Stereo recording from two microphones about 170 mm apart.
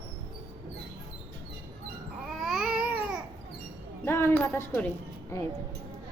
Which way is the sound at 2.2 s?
Centre (ahead or behind).